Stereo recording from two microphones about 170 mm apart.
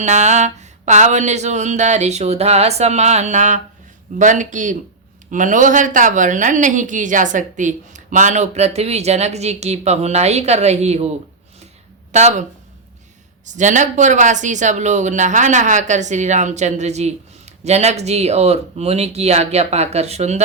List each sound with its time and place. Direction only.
0.0 s speech: 40° right (ahead or behind)
12.1 s speech: 40° right (ahead or behind)